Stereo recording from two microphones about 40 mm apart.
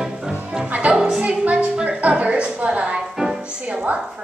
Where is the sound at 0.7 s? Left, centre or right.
Right.